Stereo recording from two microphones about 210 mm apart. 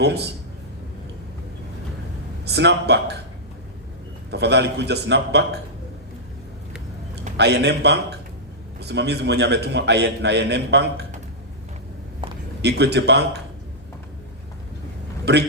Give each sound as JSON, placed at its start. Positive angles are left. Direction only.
{"t": 2.4, "sound": "speech", "side_deg": -55}
{"t": 4.3, "sound": "a man's voice", "side_deg": -55}
{"t": 7.3, "sound": "a man's voice", "side_deg": -55}
{"t": 12.6, "sound": "a man's voice", "side_deg": -55}
{"t": 15.2, "sound": "speech", "side_deg": -55}